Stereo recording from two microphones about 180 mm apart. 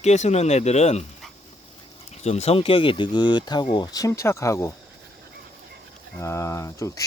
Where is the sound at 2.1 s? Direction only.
35° left (ahead or behind); by 4.7 s 15° left (ahead or behind).